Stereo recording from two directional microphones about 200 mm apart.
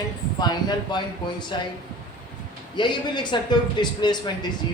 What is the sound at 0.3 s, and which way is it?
Speech, 20° left (ahead or behind).